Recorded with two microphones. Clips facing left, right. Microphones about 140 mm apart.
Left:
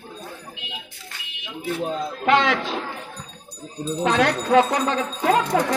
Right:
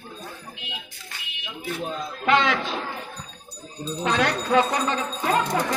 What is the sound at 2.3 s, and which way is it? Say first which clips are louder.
Speech: left 2 dB; 65° left (ahead or behind).